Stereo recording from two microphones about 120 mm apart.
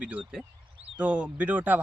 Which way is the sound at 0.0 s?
10° right (ahead or behind).